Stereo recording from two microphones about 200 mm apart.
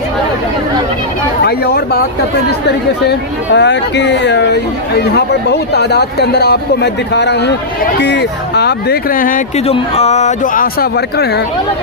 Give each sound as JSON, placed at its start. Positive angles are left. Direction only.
{"t": 1.5, "sound": "speech", "side_deg": 55}
{"t": 9.6, "sound": "speech", "side_deg": 30}